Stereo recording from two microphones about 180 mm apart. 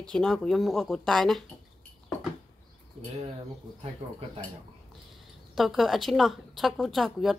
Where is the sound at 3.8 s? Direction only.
30° right (ahead or behind).